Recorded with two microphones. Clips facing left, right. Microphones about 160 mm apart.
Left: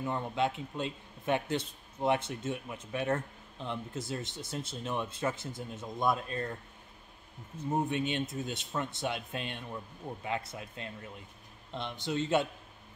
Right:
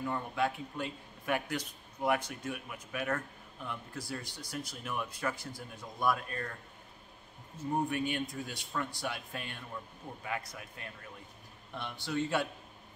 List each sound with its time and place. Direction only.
0.0 s a man's voice: 20° left (ahead or behind)
7.7 s a man's voice: 20° left (ahead or behind)